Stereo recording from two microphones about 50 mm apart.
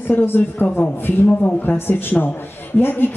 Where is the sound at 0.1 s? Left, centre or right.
Left.